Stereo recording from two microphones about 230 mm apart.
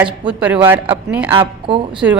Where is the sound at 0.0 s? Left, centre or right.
Centre.